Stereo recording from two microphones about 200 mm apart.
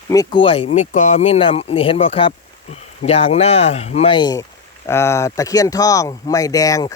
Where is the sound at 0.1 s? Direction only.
20° left (ahead or behind).